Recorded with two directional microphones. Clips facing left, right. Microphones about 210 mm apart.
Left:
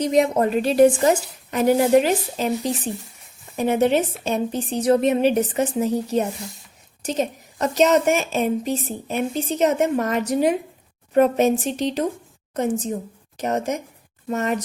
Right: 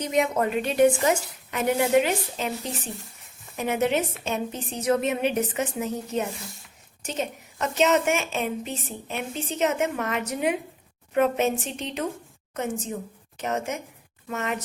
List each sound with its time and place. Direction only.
0.0 s a woman's voice: 35° left (ahead or behind)